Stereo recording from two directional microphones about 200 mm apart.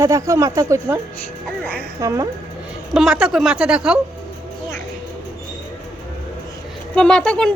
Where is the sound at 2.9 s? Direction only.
5° right (ahead or behind).